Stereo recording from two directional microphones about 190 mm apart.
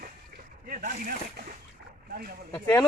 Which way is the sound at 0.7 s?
50° right (ahead or behind).